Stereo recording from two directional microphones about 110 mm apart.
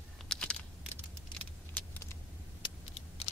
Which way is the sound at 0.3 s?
10° left (ahead or behind).